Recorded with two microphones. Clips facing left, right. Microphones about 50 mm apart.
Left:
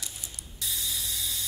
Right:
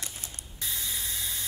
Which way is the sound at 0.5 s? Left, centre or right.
Right.